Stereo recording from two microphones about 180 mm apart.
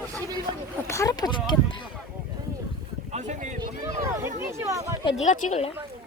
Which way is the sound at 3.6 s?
20° right (ahead or behind).